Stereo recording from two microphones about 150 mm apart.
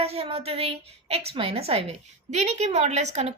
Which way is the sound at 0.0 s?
40° right (ahead or behind).